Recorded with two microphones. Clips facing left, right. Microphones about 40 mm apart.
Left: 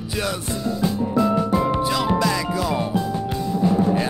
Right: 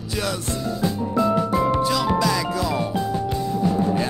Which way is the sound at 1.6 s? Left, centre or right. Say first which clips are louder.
Even; centre.